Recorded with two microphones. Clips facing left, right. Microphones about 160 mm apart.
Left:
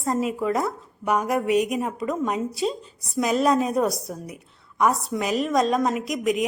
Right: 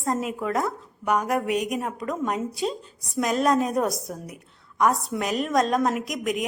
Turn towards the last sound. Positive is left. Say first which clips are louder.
# left 3 dB
turn(degrees=0)  # may be behind; listen again after turning